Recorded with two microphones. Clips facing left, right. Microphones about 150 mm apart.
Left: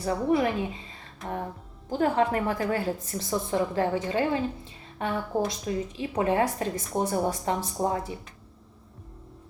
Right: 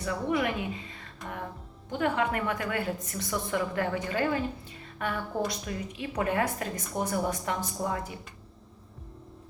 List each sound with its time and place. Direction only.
0.0 s a woman's voice: 35° left (ahead or behind)